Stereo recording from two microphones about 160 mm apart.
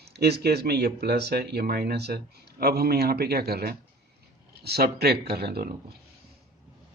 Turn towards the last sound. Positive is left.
turn(degrees=-75)  # may be behind; listen again after turning